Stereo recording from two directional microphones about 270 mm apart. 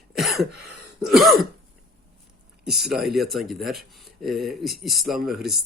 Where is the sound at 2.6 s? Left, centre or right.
Centre.